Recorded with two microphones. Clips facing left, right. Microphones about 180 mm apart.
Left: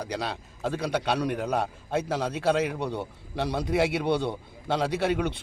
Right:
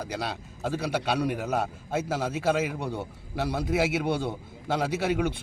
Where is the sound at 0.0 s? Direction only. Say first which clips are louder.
Left 1 dB; 5° right (ahead or behind).